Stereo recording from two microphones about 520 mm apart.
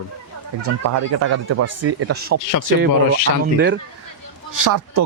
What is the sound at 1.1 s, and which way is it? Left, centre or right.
Speech, right.